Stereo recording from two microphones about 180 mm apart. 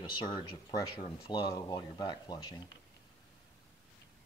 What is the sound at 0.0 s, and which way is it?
Speech, 25° left (ahead or behind).